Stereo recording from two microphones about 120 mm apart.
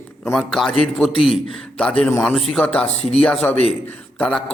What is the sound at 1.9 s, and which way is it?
Speech, 15° left (ahead or behind).